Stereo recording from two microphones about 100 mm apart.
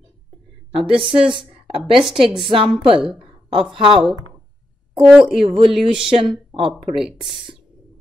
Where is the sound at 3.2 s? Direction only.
60° right (ahead or behind).